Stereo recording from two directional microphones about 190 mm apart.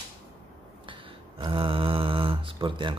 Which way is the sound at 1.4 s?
25° right (ahead or behind).